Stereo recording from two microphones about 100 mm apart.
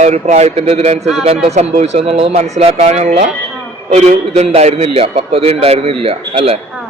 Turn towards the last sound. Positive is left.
turn(degrees=-85)